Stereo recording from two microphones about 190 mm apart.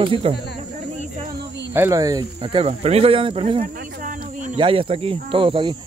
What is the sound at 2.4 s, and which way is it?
Speech, 30° right (ahead or behind).